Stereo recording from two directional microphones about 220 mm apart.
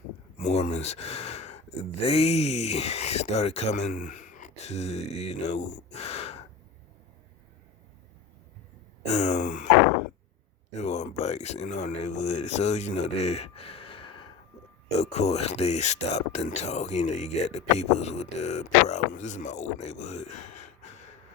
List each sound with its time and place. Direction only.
0.3 s speech: 35° left (ahead or behind)
9.0 s speech: 30° left (ahead or behind)
10.8 s speech: 30° left (ahead or behind)